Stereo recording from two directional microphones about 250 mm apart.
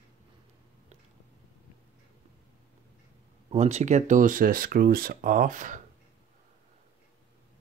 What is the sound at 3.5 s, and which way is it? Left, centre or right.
Speech, right.